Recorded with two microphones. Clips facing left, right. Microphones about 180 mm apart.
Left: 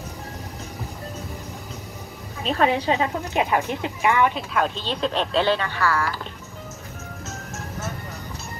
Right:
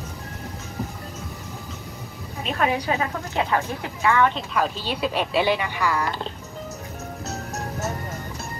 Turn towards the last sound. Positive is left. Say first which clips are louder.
# right 4 dB
turn(degrees=-40)  # may be behind; listen again after turning